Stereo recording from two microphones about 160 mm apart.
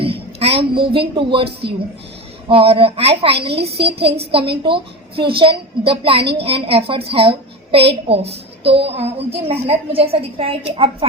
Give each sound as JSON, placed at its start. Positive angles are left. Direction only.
{"t": 0.0, "sound": "a woman's voice", "side_deg": -35}
{"t": 2.5, "sound": "a woman's voice", "side_deg": -35}